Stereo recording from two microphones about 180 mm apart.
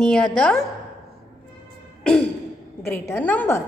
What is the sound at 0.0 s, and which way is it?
Speech, 5° left (ahead or behind).